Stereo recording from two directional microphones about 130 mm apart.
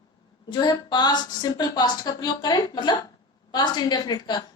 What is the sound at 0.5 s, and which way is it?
A woman's voice, 30° left (ahead or behind).